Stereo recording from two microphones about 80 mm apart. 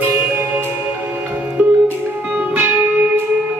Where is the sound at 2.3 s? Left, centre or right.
Right.